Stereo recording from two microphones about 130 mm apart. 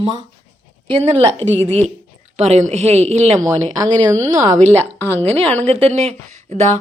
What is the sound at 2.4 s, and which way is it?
A woman's voice, 60° right (ahead or behind).